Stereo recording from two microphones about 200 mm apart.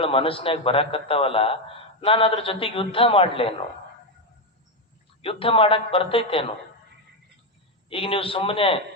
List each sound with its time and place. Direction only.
0.0 s a man's voice: 25° left (ahead or behind)
5.2 s a man's voice: 25° left (ahead or behind)
7.9 s a man's voice: 25° left (ahead or behind)